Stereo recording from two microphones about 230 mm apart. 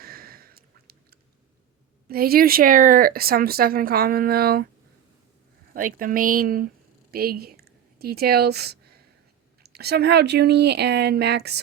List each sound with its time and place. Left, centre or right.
0.0 s a sound: right
2.0 s speech: right
5.7 s speech: right